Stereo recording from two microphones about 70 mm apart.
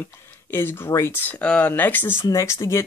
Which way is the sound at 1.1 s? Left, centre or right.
Left.